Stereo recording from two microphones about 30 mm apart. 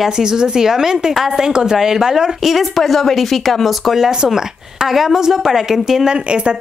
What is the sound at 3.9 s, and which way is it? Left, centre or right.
Speech, centre.